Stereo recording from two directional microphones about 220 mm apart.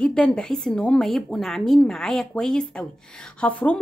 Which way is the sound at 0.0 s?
5° left (ahead or behind).